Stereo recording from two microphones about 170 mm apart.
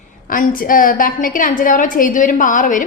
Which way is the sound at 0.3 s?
55° left (ahead or behind).